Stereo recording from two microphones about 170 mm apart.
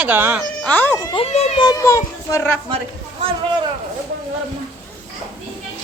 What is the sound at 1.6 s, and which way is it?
Speech, 20° left (ahead or behind).